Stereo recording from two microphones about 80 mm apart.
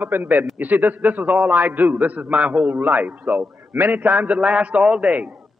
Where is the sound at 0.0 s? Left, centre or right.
Right.